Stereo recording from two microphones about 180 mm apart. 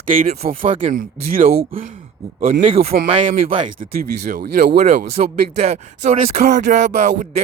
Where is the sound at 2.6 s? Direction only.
35° right (ahead or behind).